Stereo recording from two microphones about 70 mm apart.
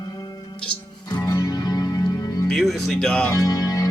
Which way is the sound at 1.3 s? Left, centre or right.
Left.